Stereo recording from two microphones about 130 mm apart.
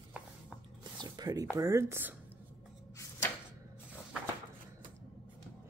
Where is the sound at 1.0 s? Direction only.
30° right (ahead or behind).